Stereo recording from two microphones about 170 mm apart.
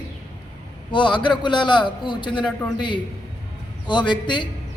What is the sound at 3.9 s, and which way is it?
Speech, 25° left (ahead or behind).